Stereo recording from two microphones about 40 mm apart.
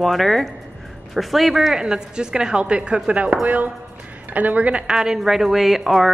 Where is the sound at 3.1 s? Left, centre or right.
Right.